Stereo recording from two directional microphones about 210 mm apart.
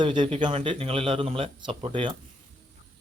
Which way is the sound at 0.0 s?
20° right (ahead or behind).